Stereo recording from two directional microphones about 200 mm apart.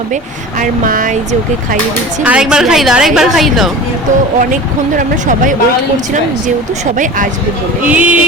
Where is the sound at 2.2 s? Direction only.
5° right (ahead or behind).